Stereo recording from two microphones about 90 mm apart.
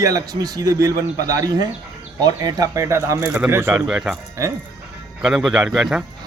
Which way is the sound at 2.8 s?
30° right (ahead or behind).